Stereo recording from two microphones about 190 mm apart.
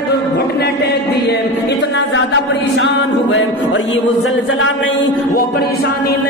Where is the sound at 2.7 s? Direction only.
70° left (ahead or behind).